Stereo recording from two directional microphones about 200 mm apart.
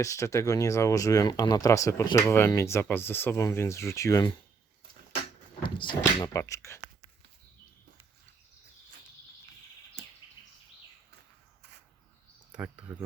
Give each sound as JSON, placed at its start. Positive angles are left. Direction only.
{"t": 0.0, "sound": "speech", "side_deg": 15}
{"t": 5.6, "sound": "speech", "side_deg": 25}
{"t": 12.5, "sound": "speech", "side_deg": -5}